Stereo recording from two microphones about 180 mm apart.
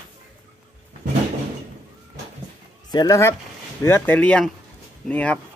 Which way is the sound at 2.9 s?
20° left (ahead or behind).